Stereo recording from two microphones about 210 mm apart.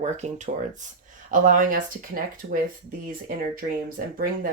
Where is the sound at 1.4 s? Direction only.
40° right (ahead or behind).